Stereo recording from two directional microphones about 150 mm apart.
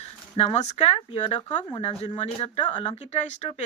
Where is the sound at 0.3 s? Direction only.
45° left (ahead or behind).